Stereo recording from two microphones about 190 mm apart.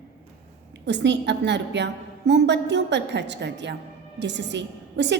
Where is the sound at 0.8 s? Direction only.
65° right (ahead or behind).